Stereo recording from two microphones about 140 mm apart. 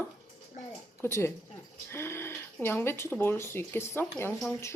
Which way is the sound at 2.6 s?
15° left (ahead or behind).